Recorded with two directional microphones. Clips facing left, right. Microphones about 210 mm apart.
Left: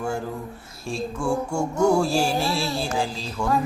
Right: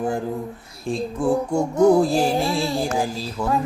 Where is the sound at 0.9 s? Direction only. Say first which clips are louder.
Right 4 dB; 20° right (ahead or behind).